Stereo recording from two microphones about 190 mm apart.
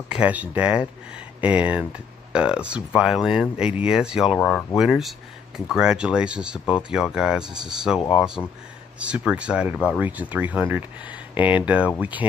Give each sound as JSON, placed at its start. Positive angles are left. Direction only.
{"t": 0.1, "sound": "speech", "side_deg": -5}
{"t": 4.4, "sound": "speech", "side_deg": 10}
{"t": 4.7, "sound": "speech", "side_deg": 0}
{"t": 9.0, "sound": "speech", "side_deg": -5}